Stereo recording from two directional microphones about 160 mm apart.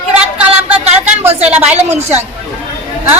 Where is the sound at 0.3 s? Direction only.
10° right (ahead or behind).